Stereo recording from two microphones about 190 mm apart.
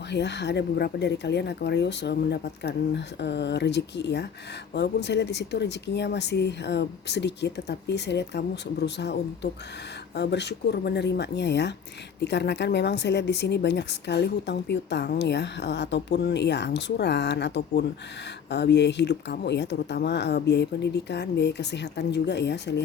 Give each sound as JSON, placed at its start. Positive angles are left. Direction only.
{"t": 0.1, "sound": "speech", "side_deg": 65}